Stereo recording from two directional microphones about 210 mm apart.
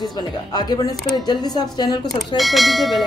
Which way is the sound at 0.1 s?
20° left (ahead or behind).